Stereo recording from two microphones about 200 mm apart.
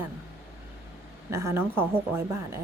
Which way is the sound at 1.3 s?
15° right (ahead or behind).